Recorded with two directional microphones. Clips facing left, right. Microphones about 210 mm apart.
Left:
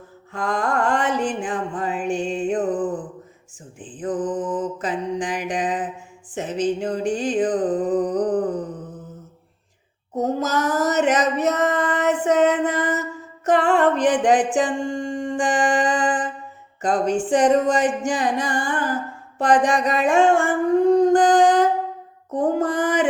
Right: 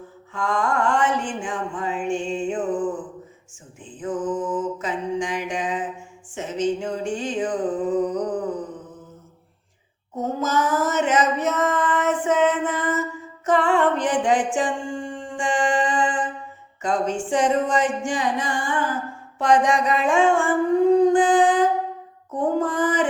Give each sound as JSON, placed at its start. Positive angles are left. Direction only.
{"t": 0.3, "sound": "mantra", "side_deg": 35}
{"t": 1.5, "sound": "music", "side_deg": 35}
{"t": 3.8, "sound": "mantra", "side_deg": 35}
{"t": 6.3, "sound": "a sound", "side_deg": 35}
{"t": 10.2, "sound": "female singing", "side_deg": 40}
{"t": 13.4, "sound": "music", "side_deg": 40}
{"t": 16.8, "sound": "a sound", "side_deg": 35}
{"t": 22.3, "sound": "music", "side_deg": 40}